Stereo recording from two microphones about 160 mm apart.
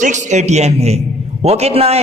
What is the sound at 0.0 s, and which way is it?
A man's voice, 50° right (ahead or behind).